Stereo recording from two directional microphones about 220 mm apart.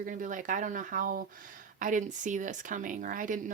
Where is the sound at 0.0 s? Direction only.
35° right (ahead or behind).